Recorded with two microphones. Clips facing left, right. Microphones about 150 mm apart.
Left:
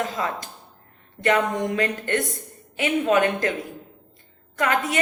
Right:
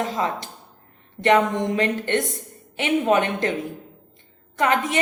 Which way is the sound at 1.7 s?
25° right (ahead or behind).